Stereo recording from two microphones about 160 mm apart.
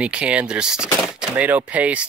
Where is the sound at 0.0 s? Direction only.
10° right (ahead or behind).